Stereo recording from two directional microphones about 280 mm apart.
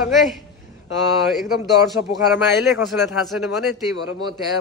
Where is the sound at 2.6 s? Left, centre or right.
Centre.